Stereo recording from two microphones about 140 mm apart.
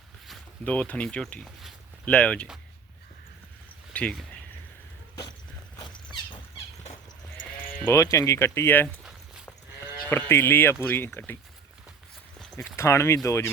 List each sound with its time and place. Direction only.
0.6 s speech: 10° left (ahead or behind)
3.9 s speech: 5° left (ahead or behind)
5.8 s a sound: 35° left (ahead or behind)
7.7 s speech: 20° left (ahead or behind)
10.1 s speech: 15° left (ahead or behind)
12.5 s speech: 20° left (ahead or behind)